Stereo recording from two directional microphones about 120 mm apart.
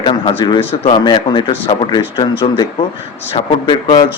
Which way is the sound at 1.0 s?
40° left (ahead or behind).